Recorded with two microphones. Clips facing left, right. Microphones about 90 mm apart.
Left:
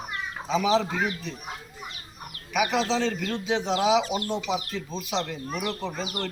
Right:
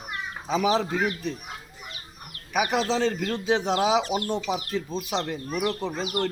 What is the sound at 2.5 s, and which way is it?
Speech, 40° right (ahead or behind).